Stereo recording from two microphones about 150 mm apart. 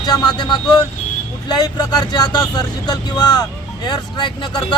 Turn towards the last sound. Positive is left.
turn(degrees=30)  # may be behind; listen again after turning